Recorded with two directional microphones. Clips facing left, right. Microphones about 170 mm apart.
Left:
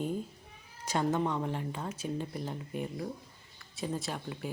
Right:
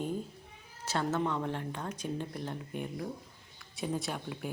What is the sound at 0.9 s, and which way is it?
Speech, 15° left (ahead or behind).